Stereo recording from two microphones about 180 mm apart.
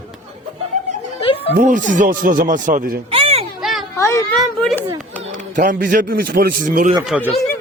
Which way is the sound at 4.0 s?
15° left (ahead or behind).